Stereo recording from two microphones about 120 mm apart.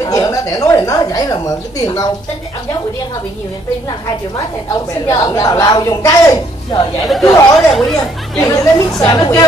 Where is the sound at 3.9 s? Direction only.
30° left (ahead or behind).